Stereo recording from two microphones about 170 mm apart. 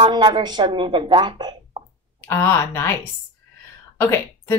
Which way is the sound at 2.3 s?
15° left (ahead or behind).